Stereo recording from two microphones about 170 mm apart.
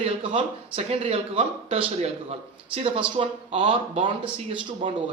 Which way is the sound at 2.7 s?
30° right (ahead or behind).